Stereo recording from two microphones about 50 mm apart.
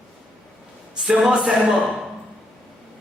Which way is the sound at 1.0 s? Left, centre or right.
Centre.